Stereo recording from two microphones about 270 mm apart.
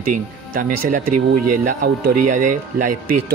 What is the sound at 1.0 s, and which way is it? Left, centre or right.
Speech, right.